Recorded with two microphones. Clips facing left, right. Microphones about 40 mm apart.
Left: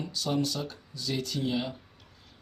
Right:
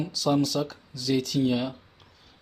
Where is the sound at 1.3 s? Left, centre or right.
Right.